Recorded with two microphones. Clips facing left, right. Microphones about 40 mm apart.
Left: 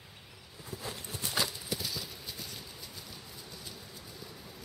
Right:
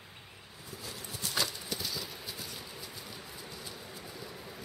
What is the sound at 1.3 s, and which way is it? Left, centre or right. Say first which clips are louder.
Clip-clop: left 1 dB; centre.